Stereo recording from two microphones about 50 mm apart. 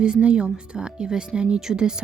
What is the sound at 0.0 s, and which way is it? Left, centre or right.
Speech, centre.